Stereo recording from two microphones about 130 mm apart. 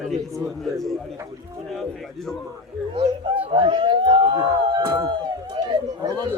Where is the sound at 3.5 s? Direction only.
40° right (ahead or behind).